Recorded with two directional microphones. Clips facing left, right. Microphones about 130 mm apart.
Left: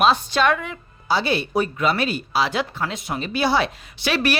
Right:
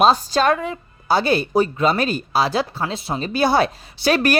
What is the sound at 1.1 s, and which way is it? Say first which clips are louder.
Speech: right 4 dB; 50° right (ahead or behind).